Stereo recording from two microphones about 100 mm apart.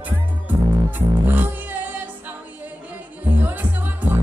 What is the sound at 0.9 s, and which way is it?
Music, 15° right (ahead or behind).